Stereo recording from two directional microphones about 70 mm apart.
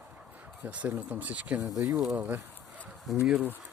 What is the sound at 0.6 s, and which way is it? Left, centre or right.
Speech, right.